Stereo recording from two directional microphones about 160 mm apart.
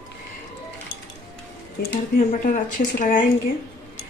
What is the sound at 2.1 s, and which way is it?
Speech, 55° left (ahead or behind).